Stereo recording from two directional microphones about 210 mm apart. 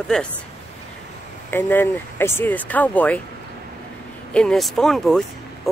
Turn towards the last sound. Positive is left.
turn(degrees=0)  # may be behind; listen again after turning